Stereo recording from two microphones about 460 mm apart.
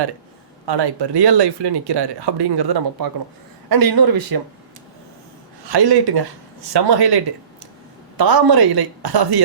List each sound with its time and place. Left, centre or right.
0.6 s speech: right
5.6 s speech: right